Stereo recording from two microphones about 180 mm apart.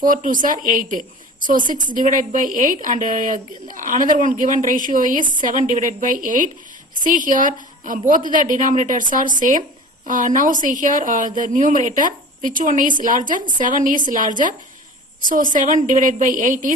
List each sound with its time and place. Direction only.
0.0 s a woman's voice: 50° right (ahead or behind)
15.5 s a woman's voice: 45° right (ahead or behind)